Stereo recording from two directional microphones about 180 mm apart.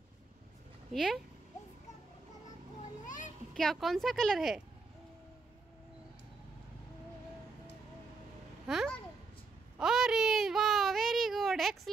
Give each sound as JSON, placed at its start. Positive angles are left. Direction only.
{"t": 0.9, "sound": "a woman's voice", "side_deg": 0}
{"t": 2.8, "sound": "children playing", "side_deg": 45}
{"t": 3.5, "sound": "a woman's voice", "side_deg": 0}
{"t": 8.6, "sound": "a child's voice", "side_deg": 0}
{"t": 9.8, "sound": "a sound", "side_deg": -5}